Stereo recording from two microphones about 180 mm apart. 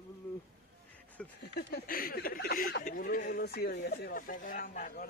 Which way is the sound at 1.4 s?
65° left (ahead or behind).